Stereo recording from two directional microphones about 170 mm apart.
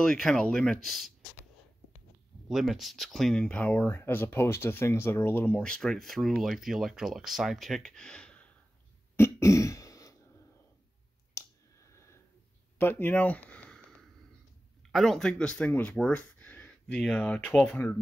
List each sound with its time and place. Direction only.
0.0 s speech: 5° left (ahead or behind)
2.4 s speech: centre (ahead or behind)
9.1 s throat clearing: 15° left (ahead or behind)
11.4 s clicking: 15° left (ahead or behind)
11.9 s a sound: 15° left (ahead or behind)
14.9 s speech: centre (ahead or behind)